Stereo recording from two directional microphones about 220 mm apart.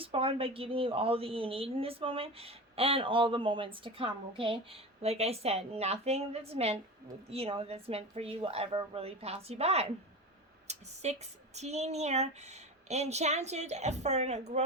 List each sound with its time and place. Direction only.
0.0 s a woman's voice: 25° right (ahead or behind)